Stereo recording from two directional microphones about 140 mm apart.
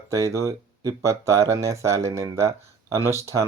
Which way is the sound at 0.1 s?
20° right (ahead or behind).